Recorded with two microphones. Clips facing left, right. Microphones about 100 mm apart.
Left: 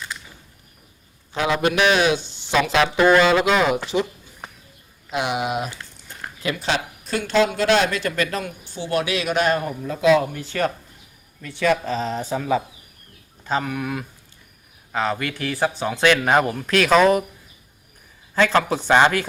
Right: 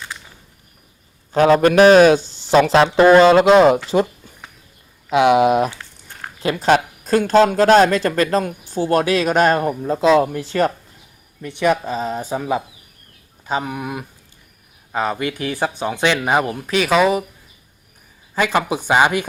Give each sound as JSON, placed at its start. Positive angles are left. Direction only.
{"t": 1.3, "sound": "speech", "side_deg": -45}
{"t": 5.1, "sound": "speech", "side_deg": -65}
{"t": 6.4, "sound": "speech", "side_deg": -40}
{"t": 11.4, "sound": "speech", "side_deg": -20}
{"t": 18.3, "sound": "speech", "side_deg": -10}